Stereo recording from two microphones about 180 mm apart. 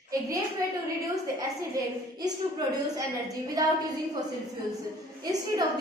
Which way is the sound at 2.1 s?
20° right (ahead or behind).